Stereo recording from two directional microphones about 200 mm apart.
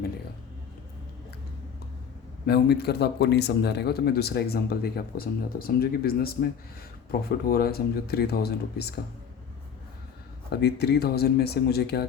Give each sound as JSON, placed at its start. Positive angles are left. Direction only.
{"t": 2.5, "sound": "speech", "side_deg": 55}
{"t": 10.6, "sound": "speech", "side_deg": 55}